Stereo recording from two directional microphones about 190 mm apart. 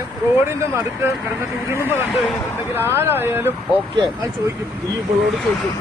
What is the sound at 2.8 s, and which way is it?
Speech, 10° right (ahead or behind).